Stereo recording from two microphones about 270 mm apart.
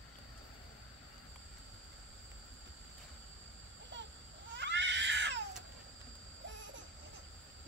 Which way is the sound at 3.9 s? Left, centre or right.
Right.